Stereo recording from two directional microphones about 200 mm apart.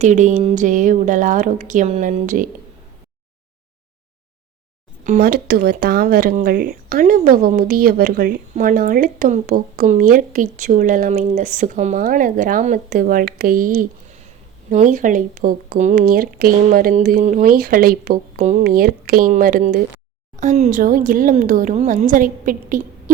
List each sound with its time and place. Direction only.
0.0 s a woman's voice: 35° right (ahead or behind)
5.0 s a woman's voice: 45° right (ahead or behind)